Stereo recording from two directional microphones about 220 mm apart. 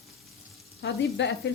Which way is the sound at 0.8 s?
55° left (ahead or behind).